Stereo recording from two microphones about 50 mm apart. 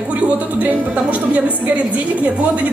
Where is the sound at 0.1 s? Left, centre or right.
Right.